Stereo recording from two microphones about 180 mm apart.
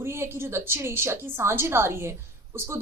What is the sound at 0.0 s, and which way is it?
A woman's voice, 15° right (ahead or behind).